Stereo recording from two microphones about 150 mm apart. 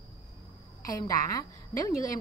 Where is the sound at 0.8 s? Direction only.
20° left (ahead or behind).